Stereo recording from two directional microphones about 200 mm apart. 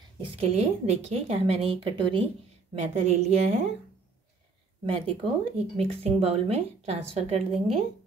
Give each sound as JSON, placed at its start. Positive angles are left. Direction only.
{"t": 0.2, "sound": "a woman's voice", "side_deg": -30}
{"t": 4.8, "sound": "a woman's voice", "side_deg": -25}